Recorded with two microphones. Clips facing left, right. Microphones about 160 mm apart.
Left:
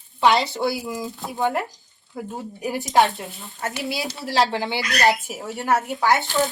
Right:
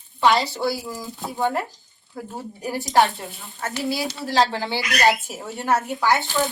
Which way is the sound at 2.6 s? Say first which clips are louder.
Even; 20° left (ahead or behind).